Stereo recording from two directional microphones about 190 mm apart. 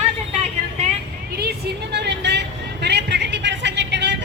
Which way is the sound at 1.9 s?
60° right (ahead or behind).